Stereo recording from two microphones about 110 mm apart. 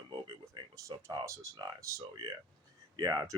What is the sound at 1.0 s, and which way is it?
Speech, 30° right (ahead or behind).